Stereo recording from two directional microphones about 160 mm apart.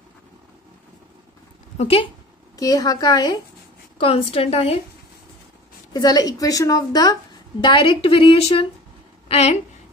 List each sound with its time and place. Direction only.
1.8 s a woman's voice: 35° left (ahead or behind)
2.5 s a woman's voice: 25° left (ahead or behind)
4.0 s a woman's voice: 40° left (ahead or behind)
5.9 s a woman's voice: 25° left (ahead or behind); by 9.6 s 40° left (ahead or behind)